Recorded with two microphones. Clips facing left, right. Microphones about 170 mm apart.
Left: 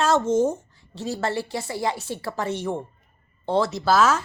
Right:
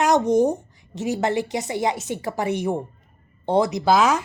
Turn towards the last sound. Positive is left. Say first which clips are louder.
# right 1 dB
turn(degrees=-15)  # may be behind; listen again after turning